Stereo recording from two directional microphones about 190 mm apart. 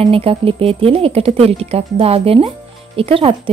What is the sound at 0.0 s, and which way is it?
A woman's voice, 30° right (ahead or behind).